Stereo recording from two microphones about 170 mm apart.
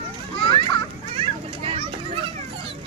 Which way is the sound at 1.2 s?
30° right (ahead or behind).